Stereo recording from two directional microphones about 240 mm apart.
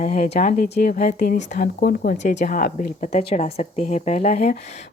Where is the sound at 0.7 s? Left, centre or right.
Left.